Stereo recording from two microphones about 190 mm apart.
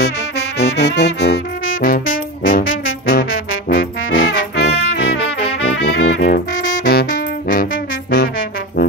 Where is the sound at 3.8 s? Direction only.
90° left; by 4.7 s 60° left (ahead or behind).